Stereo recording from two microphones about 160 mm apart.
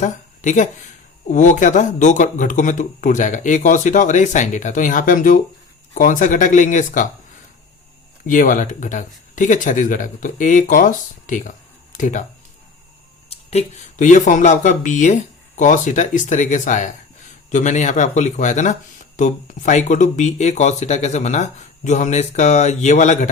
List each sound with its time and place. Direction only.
0.0 s speech: 50° left (ahead or behind)
8.3 s speech: 55° left (ahead or behind)
13.3 s speech: 40° left (ahead or behind)